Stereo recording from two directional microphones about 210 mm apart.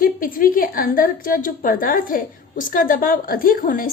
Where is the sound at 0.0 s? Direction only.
40° left (ahead or behind).